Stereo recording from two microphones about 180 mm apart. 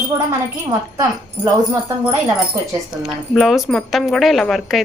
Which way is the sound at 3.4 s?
Centre (ahead or behind).